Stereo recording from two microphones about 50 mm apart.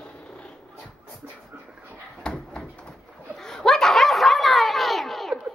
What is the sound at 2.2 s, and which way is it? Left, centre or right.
Door, centre.